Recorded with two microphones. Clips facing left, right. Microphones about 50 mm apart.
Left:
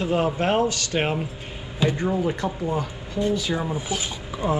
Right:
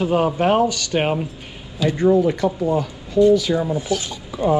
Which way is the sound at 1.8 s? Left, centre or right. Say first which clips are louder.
Right 2 dB; left.